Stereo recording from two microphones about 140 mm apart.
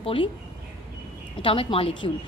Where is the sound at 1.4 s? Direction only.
40° left (ahead or behind).